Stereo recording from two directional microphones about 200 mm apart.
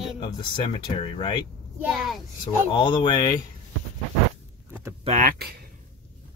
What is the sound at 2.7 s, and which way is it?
Speech, 25° left (ahead or behind).